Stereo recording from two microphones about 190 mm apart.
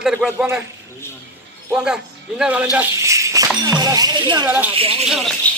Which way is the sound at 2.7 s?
15° right (ahead or behind).